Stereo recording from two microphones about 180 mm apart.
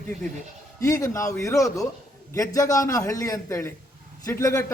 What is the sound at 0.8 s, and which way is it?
A man's voice, 20° left (ahead or behind).